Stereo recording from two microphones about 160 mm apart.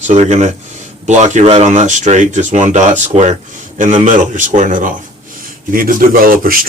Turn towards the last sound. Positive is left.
turn(degrees=-60)  # may be behind; listen again after turning